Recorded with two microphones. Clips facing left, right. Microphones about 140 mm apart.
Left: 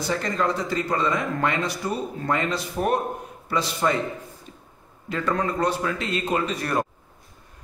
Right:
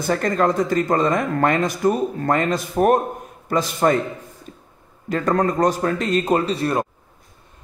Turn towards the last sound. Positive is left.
turn(degrees=-25)  # may be behind; listen again after turning